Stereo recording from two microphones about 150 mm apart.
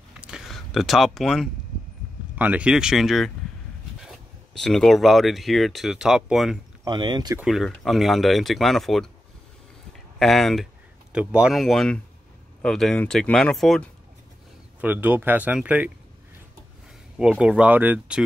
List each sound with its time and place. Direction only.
0.2 s a sound: 5° right (ahead or behind)
2.3 s speech: 10° right (ahead or behind)
4.6 s speech: 5° left (ahead or behind)
6.8 s speech: 30° right (ahead or behind)
7.4 s speech: centre (ahead or behind)
10.1 s speech: centre (ahead or behind)
14.8 s speech: 10° right (ahead or behind)
17.2 s speech: 5° right (ahead or behind)